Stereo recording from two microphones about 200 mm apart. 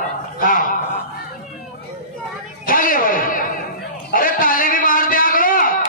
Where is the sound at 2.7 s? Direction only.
45° left (ahead or behind).